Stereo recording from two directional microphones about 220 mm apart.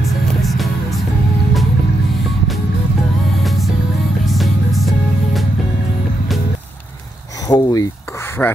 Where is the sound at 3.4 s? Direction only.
Centre (ahead or behind).